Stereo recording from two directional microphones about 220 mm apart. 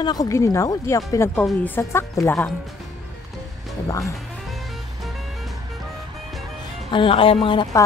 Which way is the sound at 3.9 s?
15° left (ahead or behind).